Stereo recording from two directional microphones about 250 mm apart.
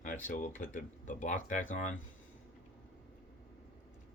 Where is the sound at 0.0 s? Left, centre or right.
Left.